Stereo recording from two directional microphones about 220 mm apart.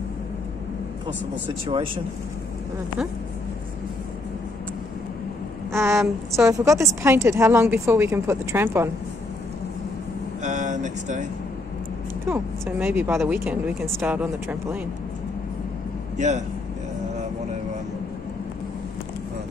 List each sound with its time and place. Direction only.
5.7 s a woman's voice: 10° right (ahead or behind)
10.4 s speech: 35° right (ahead or behind)
12.3 s a woman's voice: 10° right (ahead or behind)
16.2 s speech: 30° right (ahead or behind)